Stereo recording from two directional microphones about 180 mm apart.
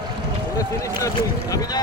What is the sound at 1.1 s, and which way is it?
Speech, 20° left (ahead or behind).